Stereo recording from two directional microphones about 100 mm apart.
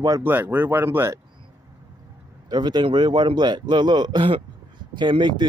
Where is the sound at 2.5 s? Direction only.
50° right (ahead or behind).